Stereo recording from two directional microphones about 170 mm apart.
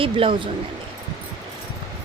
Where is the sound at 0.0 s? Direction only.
30° right (ahead or behind).